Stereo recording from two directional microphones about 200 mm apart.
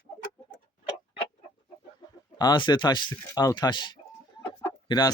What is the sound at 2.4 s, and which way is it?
Speech, 20° left (ahead or behind).